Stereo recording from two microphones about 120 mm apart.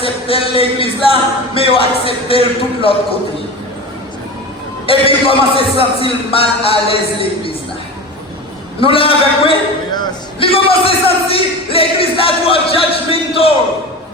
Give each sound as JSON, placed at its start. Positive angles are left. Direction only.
{"t": 0.0, "sound": "a man's voice", "side_deg": 50}
{"t": 4.9, "sound": "a man's voice", "side_deg": 50}
{"t": 8.8, "sound": "a man's voice", "side_deg": 50}
{"t": 10.4, "sound": "a sound", "side_deg": 50}